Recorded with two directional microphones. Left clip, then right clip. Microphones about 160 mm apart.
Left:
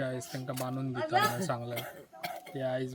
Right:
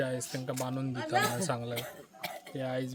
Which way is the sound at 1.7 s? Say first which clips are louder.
Right 1 dB; 10° left (ahead or behind).